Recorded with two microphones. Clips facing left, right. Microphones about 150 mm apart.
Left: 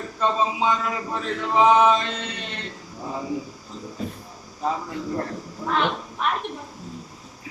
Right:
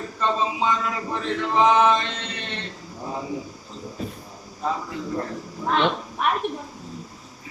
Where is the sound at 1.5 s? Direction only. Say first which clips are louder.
Left 1 dB; 10° left (ahead or behind).